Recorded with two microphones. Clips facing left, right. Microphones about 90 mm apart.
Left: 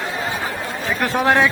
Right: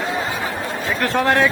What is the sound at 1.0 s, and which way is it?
Speech, 15° left (ahead or behind).